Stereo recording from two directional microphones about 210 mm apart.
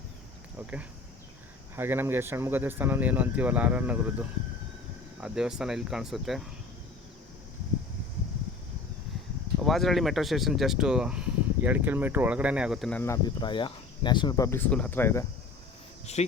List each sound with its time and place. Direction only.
1.7 s speech: 10° right (ahead or behind)
9.6 s speech: centre (ahead or behind)
16.1 s speech: 30° left (ahead or behind)